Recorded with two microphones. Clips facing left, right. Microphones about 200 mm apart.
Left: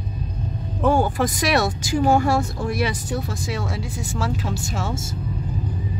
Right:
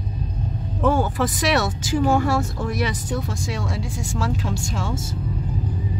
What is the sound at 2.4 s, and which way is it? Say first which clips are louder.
Speech: left 1 dB; 10° left (ahead or behind).